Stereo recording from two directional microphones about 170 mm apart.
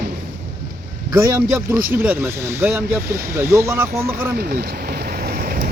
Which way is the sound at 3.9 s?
60° right (ahead or behind).